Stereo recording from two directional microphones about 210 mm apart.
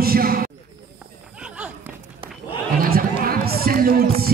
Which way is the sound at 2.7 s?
45° right (ahead or behind).